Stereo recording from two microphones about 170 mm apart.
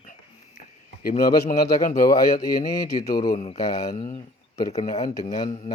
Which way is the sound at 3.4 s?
40° left (ahead or behind).